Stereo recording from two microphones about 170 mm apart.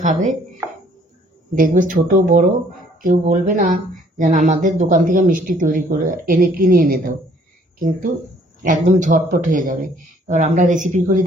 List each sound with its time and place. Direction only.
0.0 s speech: 45° right (ahead or behind)
1.5 s speech: 50° right (ahead or behind)
8.6 s speech: 50° right (ahead or behind)